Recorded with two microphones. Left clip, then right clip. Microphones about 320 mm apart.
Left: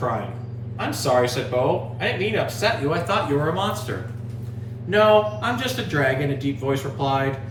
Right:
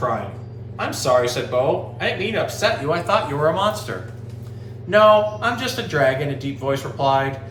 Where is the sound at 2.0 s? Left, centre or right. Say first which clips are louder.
Right 1 dB; centre.